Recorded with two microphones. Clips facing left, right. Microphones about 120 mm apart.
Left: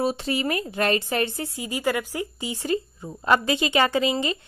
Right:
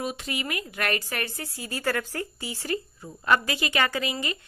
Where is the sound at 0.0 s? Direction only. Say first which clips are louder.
Left 7 dB; 30° left (ahead or behind).